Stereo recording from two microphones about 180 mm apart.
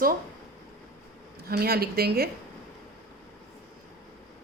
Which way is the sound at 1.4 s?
60° right (ahead or behind).